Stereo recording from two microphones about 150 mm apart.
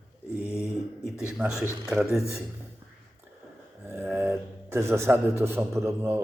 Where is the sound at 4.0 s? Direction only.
15° right (ahead or behind).